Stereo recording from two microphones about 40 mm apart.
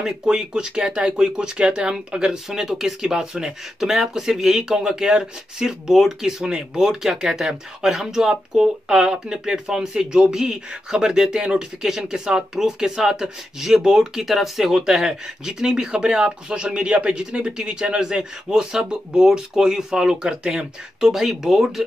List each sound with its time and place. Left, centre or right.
0.0 s speech: centre
6.4 s speech: centre
21.1 s speech: centre